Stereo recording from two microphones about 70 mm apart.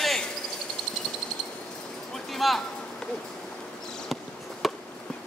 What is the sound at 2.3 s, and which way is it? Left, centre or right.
Speech, centre.